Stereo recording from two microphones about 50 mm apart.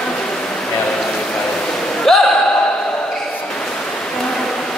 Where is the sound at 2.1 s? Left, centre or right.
Centre.